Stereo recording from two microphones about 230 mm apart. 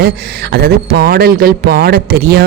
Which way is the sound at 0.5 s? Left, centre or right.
Right.